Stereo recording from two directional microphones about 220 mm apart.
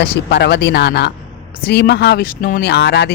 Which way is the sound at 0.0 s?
50° left (ahead or behind).